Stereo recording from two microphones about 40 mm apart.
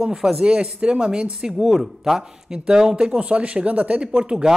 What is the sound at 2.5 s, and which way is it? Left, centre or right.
Speech, centre.